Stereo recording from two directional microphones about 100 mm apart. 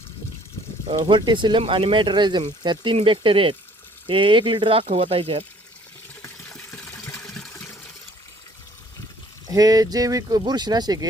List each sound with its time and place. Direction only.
1.0 s speech: 55° right (ahead or behind); by 5.5 s 70° right (ahead or behind)
6.5 s a sound: 5° left (ahead or behind)
7.3 s water: 5° left (ahead or behind)
9.5 s speech: 40° right (ahead or behind)